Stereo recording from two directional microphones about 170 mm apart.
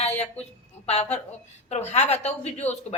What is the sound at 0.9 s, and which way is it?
Speech, 40° left (ahead or behind).